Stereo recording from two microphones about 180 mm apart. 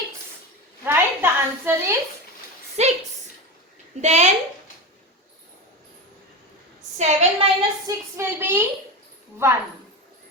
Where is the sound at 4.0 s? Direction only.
40° right (ahead or behind).